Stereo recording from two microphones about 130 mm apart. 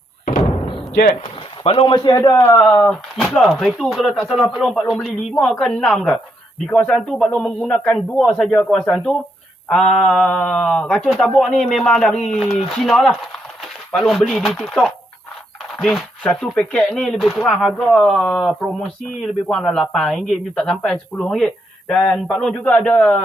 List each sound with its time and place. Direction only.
1.2 s speech: 50° left (ahead or behind)
2.0 s a man's voice: 30° left (ahead or behind)
2.4 s speech: 20° left (ahead or behind)
2.8 s speech: 5° left (ahead or behind)